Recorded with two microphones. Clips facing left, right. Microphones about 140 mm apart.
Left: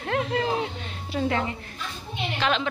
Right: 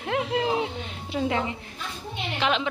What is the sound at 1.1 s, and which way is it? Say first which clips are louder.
A woman's voice: even; 15° right (ahead or behind).